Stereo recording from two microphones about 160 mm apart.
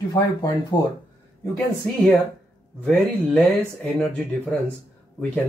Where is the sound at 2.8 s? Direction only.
10° left (ahead or behind).